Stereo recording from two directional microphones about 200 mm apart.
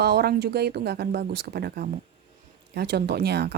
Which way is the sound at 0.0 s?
55° right (ahead or behind).